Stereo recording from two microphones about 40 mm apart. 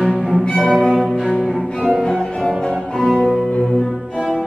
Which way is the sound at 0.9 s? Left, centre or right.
Centre.